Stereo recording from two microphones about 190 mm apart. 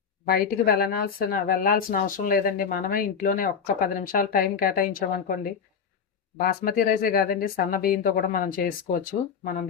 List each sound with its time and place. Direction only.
0.3 s speech: 50° left (ahead or behind)